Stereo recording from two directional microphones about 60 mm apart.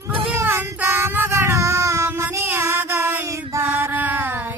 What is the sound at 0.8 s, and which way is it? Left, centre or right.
Child singing, right.